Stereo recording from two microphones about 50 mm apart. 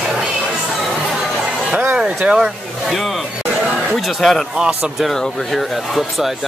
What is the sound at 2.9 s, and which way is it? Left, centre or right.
Speech, centre.